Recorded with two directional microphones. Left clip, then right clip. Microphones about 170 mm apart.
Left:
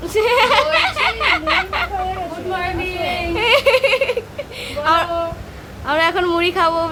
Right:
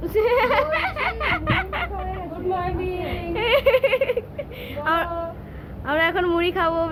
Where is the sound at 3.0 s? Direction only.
5° left (ahead or behind).